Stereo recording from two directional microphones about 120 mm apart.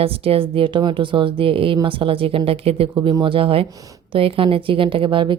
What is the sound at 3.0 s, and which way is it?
Speech, 30° right (ahead or behind).